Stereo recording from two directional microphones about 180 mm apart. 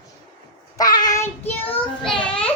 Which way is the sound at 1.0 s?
20° left (ahead or behind).